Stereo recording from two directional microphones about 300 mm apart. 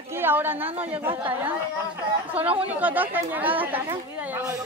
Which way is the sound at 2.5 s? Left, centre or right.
Centre.